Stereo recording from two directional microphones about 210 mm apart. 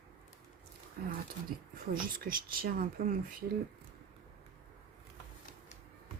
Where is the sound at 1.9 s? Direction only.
40° right (ahead or behind).